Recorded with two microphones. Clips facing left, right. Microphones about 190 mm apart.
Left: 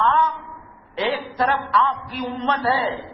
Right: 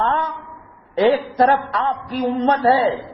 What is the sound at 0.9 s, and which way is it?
A man's voice, 45° right (ahead or behind).